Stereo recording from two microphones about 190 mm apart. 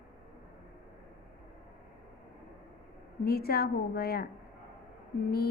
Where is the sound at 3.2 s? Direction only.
55° left (ahead or behind).